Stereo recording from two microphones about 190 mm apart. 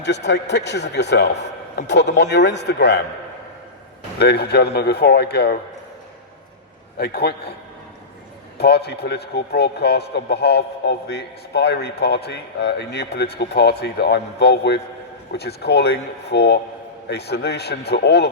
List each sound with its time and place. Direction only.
0.0 s a man's voice: 65° left (ahead or behind)
4.2 s a man's voice: 60° left (ahead or behind)
7.0 s a man's voice: 55° left (ahead or behind)
8.5 s a man's voice: 60° left (ahead or behind)